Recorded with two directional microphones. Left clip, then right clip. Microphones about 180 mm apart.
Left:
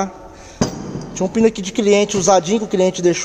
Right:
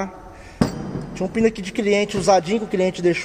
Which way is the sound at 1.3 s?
15° left (ahead or behind).